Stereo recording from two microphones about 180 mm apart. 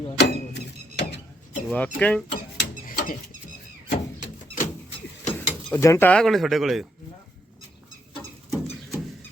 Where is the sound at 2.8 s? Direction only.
50° left (ahead or behind).